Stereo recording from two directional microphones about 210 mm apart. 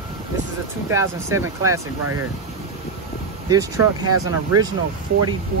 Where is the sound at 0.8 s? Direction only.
15° right (ahead or behind).